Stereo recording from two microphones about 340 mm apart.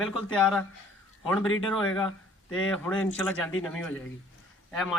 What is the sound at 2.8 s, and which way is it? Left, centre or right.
Speech, centre.